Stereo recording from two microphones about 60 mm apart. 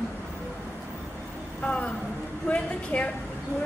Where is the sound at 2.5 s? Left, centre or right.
Left.